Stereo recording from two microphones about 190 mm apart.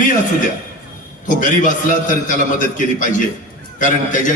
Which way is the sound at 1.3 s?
45° left (ahead or behind).